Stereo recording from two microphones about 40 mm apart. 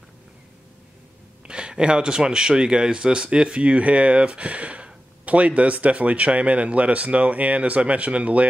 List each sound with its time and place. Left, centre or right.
1.5 s speech: right